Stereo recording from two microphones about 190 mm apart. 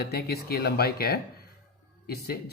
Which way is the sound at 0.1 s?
55° left (ahead or behind).